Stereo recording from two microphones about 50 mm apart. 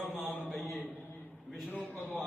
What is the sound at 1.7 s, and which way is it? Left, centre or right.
Mantra, left.